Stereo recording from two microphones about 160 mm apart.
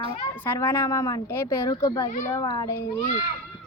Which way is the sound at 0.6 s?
15° left (ahead or behind).